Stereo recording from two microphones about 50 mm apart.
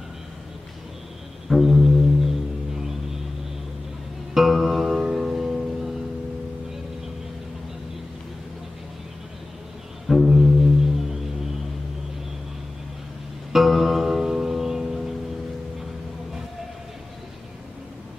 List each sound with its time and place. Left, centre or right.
1.5 s music: centre
4.3 s music: centre
10.0 s music: centre
13.5 s music: centre